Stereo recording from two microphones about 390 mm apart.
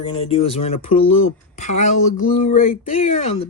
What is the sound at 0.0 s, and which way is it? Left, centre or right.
Speech, centre.